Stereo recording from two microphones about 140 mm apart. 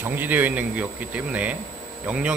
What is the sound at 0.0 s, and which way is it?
Speech, 10° right (ahead or behind).